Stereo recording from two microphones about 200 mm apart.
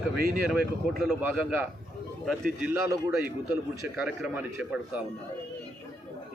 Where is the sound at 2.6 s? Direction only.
15° right (ahead or behind).